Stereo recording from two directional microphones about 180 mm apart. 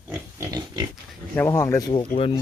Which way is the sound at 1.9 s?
30° left (ahead or behind).